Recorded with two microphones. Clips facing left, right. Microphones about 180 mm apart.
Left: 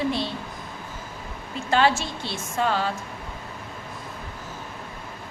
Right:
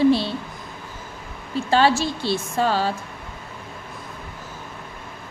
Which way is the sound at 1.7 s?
35° right (ahead or behind).